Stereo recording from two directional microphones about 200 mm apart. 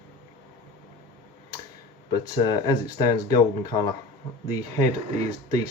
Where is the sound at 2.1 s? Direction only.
20° left (ahead or behind).